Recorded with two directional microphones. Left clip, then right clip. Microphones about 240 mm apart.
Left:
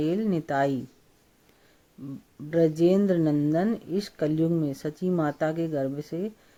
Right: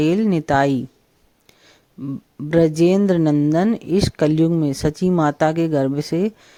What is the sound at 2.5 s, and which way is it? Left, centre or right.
Speech, right.